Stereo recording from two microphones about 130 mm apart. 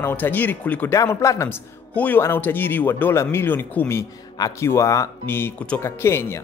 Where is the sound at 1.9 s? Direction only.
10° left (ahead or behind).